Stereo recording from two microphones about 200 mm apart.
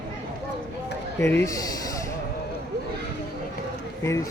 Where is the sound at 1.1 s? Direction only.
15° left (ahead or behind).